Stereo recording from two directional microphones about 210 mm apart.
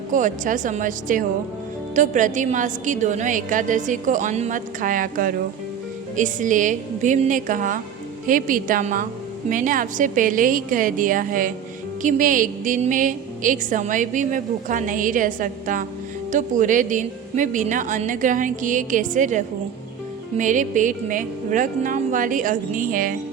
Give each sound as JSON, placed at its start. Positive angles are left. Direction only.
{"t": 0.1, "sound": "speech", "side_deg": -35}